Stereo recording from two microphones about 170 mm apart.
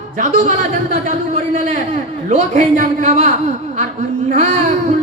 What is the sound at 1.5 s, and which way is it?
A man's voice, 45° right (ahead or behind).